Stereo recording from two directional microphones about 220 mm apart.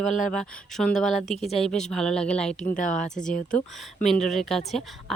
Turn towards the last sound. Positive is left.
turn(degrees=0)  # may be behind; listen again after turning